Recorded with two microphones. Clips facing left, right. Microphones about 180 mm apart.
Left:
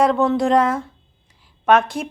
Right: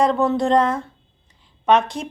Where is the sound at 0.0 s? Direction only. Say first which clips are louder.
Left 1 dB; centre (ahead or behind).